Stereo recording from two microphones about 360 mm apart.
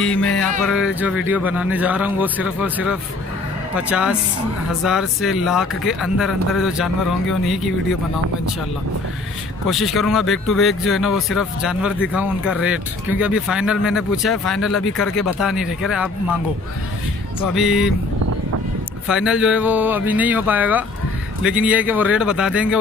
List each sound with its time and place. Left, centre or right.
0.0 s speech: centre
9.7 s speech: centre
17.4 s speech: centre
19.0 s speech: centre